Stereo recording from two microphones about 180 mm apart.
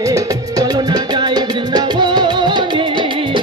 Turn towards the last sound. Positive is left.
turn(degrees=-25)  # may be behind; listen again after turning